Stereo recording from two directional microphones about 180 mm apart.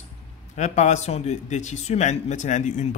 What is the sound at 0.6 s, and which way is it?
Speech, 40° left (ahead or behind).